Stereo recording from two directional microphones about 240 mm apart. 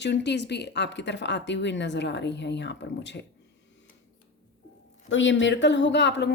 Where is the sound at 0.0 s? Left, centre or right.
Left.